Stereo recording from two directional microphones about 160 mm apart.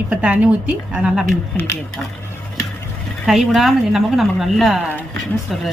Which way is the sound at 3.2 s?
Centre (ahead or behind).